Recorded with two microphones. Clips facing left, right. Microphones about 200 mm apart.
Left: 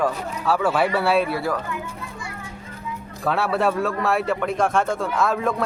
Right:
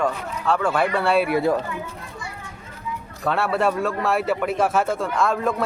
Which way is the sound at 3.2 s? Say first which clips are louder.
Even; centre (ahead or behind).